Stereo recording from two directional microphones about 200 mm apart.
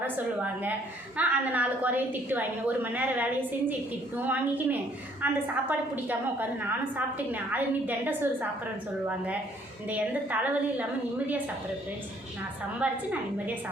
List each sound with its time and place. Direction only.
0.0 s a woman's voice: 10° right (ahead or behind)
12.8 s a woman's voice: 5° right (ahead or behind)